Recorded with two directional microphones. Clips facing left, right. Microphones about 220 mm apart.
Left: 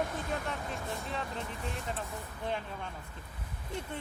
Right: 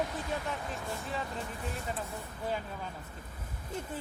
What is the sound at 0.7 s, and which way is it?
Speech, centre (ahead or behind).